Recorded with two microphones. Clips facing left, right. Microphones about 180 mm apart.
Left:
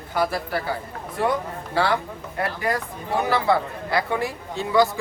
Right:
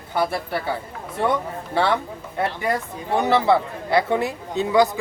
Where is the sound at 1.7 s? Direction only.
25° right (ahead or behind).